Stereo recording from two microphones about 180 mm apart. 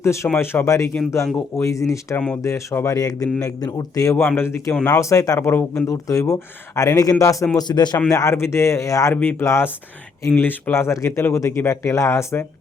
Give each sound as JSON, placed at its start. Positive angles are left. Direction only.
{"t": 0.0, "sound": "speech", "side_deg": 15}